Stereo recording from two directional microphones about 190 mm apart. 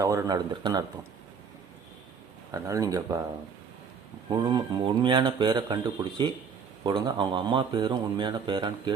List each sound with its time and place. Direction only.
0.0 s speech: 15° right (ahead or behind)
2.5 s speech: 20° right (ahead or behind)
4.3 s speech: 25° right (ahead or behind)